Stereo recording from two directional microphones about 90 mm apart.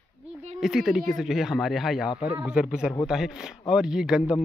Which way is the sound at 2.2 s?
15° right (ahead or behind).